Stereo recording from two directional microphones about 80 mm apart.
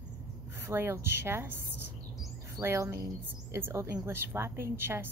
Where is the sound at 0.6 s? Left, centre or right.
Right.